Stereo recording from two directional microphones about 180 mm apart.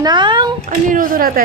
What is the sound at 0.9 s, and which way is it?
Speech, 50° right (ahead or behind).